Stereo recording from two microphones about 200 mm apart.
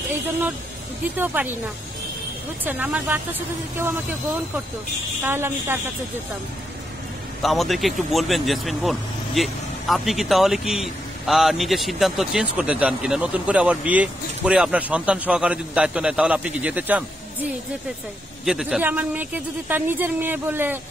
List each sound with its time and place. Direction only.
1.1 s speech: 10° right (ahead or behind)
2.6 s speech: 10° right (ahead or behind)
5.2 s speech: 10° right (ahead or behind)
7.4 s speech: centre (ahead or behind)